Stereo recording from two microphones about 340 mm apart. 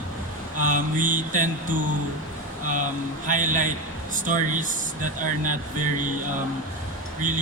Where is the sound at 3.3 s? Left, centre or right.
Right.